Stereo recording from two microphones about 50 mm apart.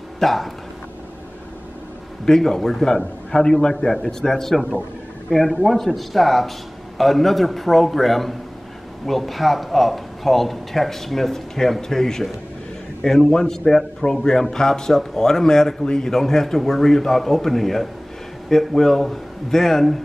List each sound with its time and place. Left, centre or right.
0.2 s speech: centre
2.2 s a man's voice: centre